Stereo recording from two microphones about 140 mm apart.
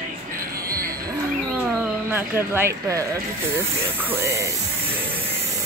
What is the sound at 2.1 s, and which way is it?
Speech, 15° right (ahead or behind).